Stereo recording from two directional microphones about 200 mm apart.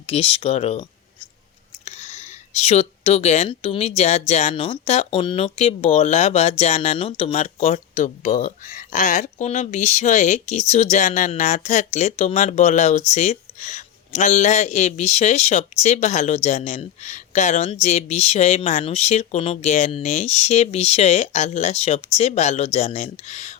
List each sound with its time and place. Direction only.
0.1 s speech: 30° left (ahead or behind)